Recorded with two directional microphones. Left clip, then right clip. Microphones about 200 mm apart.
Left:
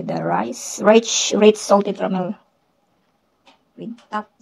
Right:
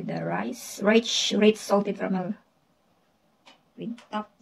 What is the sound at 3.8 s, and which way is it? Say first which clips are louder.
Speech: left 6 dB; 20° left (ahead or behind).